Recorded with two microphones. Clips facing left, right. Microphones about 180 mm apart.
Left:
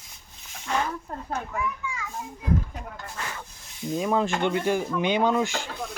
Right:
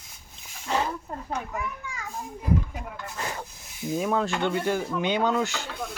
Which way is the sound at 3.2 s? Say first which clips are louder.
Right 3 dB; 35° right (ahead or behind).